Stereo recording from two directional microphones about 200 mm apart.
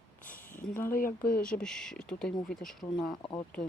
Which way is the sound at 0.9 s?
45° left (ahead or behind).